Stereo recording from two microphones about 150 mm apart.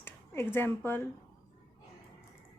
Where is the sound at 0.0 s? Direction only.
15° left (ahead or behind).